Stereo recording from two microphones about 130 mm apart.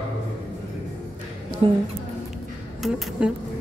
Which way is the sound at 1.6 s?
40° right (ahead or behind).